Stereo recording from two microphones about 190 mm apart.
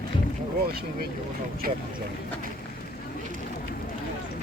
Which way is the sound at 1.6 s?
50° right (ahead or behind).